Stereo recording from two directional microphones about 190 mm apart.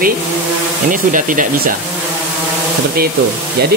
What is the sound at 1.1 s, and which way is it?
Speech, 45° right (ahead or behind).